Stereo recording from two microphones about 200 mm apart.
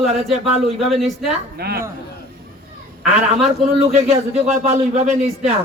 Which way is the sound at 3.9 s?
30° right (ahead or behind).